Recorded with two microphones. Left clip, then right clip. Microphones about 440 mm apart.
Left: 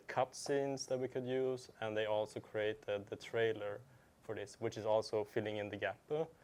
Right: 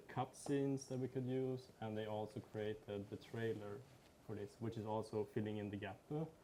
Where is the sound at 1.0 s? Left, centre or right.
Left.